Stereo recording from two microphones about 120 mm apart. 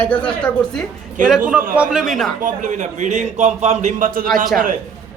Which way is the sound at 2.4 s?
90° right.